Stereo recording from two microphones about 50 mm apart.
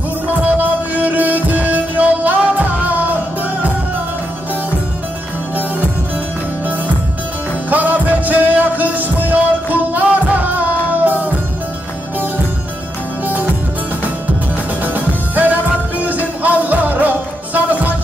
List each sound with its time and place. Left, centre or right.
0.3 s music: right
7.7 s music: right
15.0 s music: right